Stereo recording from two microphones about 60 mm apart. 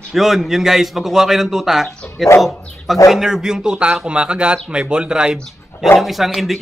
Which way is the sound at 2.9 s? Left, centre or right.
Centre.